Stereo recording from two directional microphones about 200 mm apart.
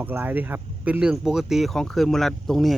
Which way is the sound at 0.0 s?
10° right (ahead or behind).